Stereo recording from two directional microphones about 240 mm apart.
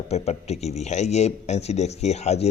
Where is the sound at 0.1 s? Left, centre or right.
Left.